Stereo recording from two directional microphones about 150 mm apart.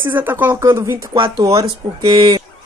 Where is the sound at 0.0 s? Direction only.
15° right (ahead or behind).